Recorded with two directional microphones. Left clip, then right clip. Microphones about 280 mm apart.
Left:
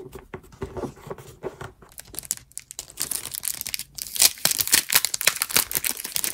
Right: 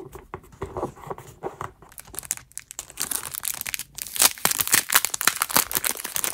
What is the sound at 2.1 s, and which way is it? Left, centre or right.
Crumpling, centre.